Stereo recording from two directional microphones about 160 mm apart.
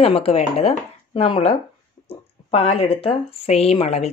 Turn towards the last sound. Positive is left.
turn(degrees=40)  # may be behind; listen again after turning